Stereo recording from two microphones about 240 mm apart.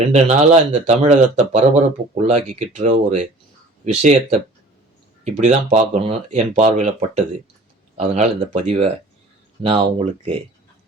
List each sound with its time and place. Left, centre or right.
0.1 s speech: right